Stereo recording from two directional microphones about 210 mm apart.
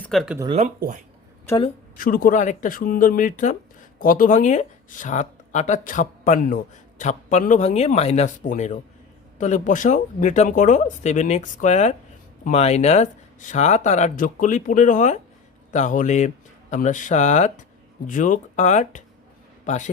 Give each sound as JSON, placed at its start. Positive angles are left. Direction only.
{"t": 0.0, "sound": "speech", "side_deg": 0}
{"t": 0.3, "sound": "speech", "side_deg": -25}
{"t": 0.8, "sound": "speech", "side_deg": -40}
{"t": 2.0, "sound": "a man's voice", "side_deg": 40}